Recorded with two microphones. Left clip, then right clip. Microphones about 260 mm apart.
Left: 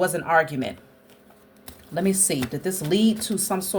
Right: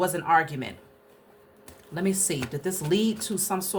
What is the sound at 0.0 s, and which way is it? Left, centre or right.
Speech, centre.